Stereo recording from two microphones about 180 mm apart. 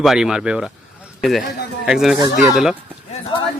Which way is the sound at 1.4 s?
60° left (ahead or behind).